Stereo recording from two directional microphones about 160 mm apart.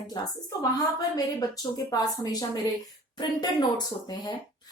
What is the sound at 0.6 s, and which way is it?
Speech, 25° left (ahead or behind).